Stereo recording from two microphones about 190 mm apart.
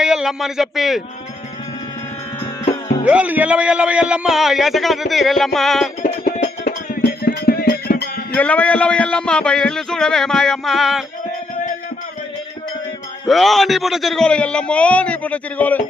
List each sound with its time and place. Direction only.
0.0 s a man's voice: 5° right (ahead or behind)
3.0 s a man's voice: 5° right (ahead or behind)
6.0 s music: 45° left (ahead or behind)
8.4 s a man's voice: 5° left (ahead or behind)
13.2 s a man's voice: centre (ahead or behind)